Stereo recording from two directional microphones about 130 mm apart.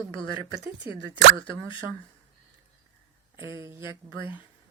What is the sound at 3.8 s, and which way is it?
Speech, 40° left (ahead or behind).